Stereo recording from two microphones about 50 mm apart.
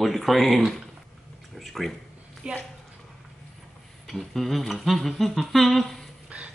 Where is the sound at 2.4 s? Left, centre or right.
Right.